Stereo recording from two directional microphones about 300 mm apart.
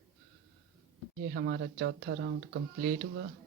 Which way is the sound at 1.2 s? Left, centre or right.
Right.